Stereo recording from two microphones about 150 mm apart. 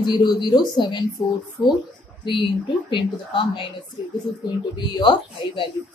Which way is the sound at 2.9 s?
35° left (ahead or behind).